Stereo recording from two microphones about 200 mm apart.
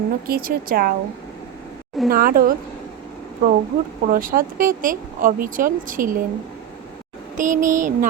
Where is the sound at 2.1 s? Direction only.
45° right (ahead or behind).